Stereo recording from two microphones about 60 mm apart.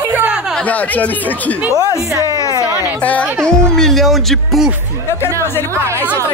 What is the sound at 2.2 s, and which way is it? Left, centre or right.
Music, left.